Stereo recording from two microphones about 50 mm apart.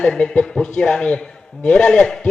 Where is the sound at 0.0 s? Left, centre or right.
Centre.